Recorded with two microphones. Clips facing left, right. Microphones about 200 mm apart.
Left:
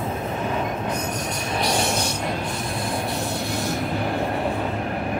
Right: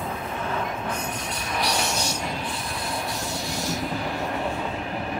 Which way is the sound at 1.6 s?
55° left (ahead or behind).